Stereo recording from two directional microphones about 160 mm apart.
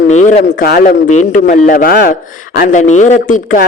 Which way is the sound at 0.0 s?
50° left (ahead or behind).